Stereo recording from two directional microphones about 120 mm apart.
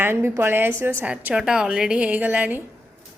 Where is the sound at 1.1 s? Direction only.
5° right (ahead or behind).